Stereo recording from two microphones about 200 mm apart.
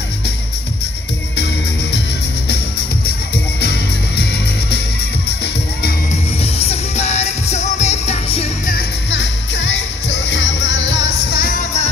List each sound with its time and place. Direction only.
6.6 s music: 30° left (ahead or behind)
8.6 s music: 55° left (ahead or behind); by 11.9 s 35° left (ahead or behind)